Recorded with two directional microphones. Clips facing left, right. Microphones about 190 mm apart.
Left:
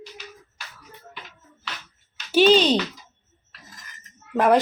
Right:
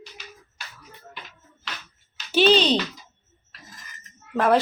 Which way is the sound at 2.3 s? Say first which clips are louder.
Left 2 dB; 10° left (ahead or behind).